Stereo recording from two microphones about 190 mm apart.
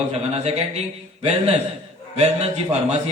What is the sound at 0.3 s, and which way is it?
A man's voice, 35° right (ahead or behind).